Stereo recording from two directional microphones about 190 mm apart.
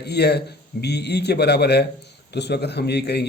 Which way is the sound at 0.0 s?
60° left (ahead or behind).